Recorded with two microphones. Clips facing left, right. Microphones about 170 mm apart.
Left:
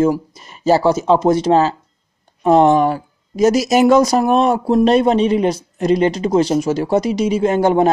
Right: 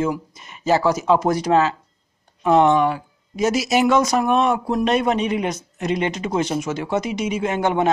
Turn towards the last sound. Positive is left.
turn(degrees=35)  # may be behind; listen again after turning